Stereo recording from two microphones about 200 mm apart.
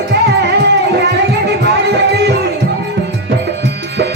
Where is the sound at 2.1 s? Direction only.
55° right (ahead or behind).